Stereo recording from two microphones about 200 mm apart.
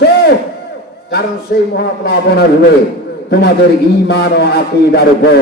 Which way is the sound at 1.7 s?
55° left (ahead or behind).